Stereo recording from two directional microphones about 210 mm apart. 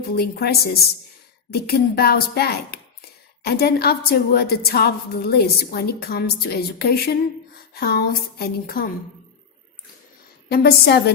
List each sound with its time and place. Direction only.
0.0 s a woman's voice: 50° left (ahead or behind)
10.5 s a woman's voice: 50° left (ahead or behind)